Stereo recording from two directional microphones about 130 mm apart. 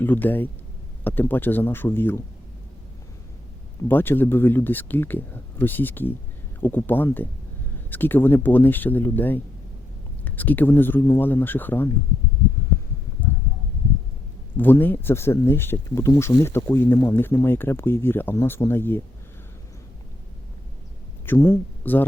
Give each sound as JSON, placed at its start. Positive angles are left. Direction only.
{"t": 0.0, "sound": "speech", "side_deg": 15}
{"t": 3.8, "sound": "speech", "side_deg": 15}
{"t": 14.5, "sound": "speech", "side_deg": 15}
{"t": 21.2, "sound": "speech", "side_deg": 20}